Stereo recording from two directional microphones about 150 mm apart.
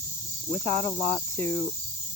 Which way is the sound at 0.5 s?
50° right (ahead or behind).